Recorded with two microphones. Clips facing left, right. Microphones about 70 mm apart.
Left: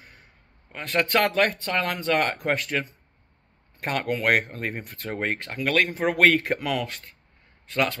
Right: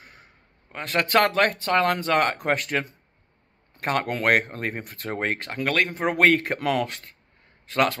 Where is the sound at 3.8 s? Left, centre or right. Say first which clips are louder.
Right 1 dB; right.